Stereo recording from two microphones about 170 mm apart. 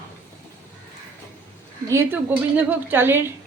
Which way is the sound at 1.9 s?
15° right (ahead or behind).